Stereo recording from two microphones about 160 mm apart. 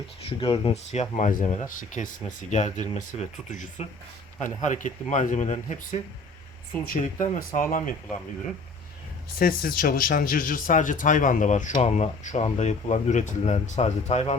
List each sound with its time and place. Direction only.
0.2 s speech: 35° left (ahead or behind); by 7.9 s 55° left (ahead or behind)
9.4 s speech: 70° left (ahead or behind); by 14.3 s 45° left (ahead or behind)